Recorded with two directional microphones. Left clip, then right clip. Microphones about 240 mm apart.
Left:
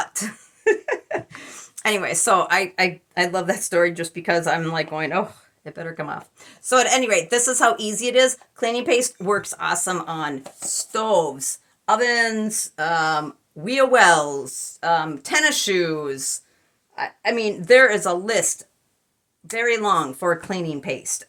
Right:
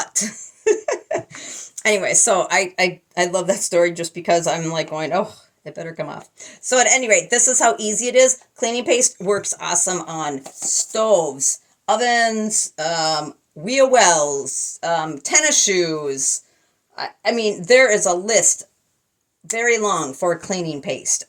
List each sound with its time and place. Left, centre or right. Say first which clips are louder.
0.0 s speech: right 3 dB; centre
19.5 s speech: right 1 dB; left